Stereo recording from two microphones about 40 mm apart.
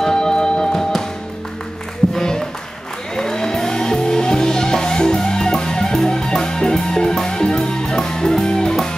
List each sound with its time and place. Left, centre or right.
0.0 s music: centre
2.1 s music: centre